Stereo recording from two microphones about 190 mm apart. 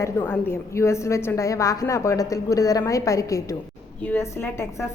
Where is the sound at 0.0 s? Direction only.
10° left (ahead or behind).